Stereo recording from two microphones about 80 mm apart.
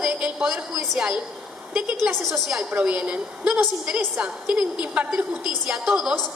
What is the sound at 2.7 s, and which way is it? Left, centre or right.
A woman's voice, centre.